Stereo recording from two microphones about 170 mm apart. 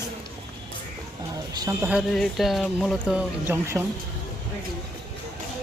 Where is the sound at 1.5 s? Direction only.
20° right (ahead or behind).